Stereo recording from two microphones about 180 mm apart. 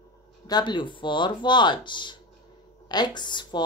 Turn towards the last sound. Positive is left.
turn(degrees=25)  # may be behind; listen again after turning